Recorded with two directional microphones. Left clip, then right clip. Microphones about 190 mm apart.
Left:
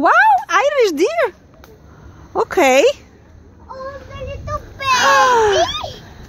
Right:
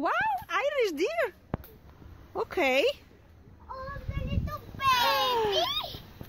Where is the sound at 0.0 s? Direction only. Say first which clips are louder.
Left 17 dB; 10° left (ahead or behind).